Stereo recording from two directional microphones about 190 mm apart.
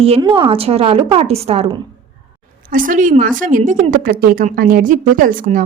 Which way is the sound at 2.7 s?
45° right (ahead or behind).